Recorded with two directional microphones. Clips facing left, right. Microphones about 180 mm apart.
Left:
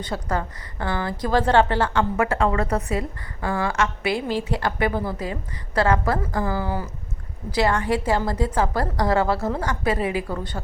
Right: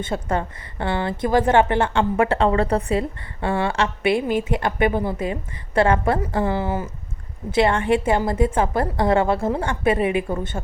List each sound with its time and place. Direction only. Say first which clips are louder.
0.0 s a woman's voice: right 3 dB; 25° right (ahead or behind)